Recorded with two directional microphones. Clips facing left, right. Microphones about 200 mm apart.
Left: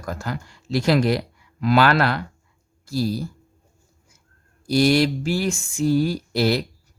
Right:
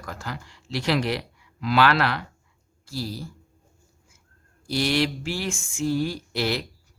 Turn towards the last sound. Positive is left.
turn(degrees=40)  # may be behind; listen again after turning